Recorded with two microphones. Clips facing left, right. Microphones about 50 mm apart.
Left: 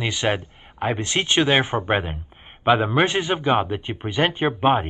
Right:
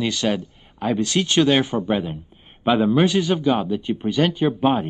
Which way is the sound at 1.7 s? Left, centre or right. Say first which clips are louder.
Even; left.